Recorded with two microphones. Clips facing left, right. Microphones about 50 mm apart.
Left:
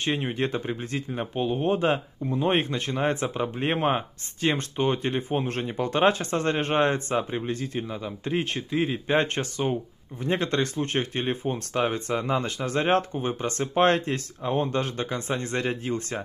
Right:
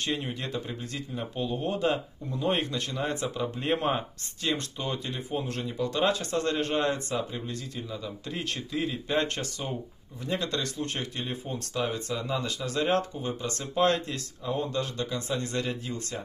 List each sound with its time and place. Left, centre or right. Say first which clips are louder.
0.0 s speech: left 5 dB; left